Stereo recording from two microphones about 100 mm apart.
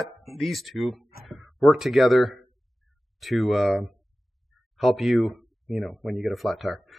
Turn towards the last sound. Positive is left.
turn(degrees=0)  # may be behind; listen again after turning